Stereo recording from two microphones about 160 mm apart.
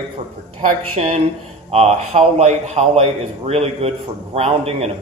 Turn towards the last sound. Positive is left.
turn(degrees=-40)  # may be behind; listen again after turning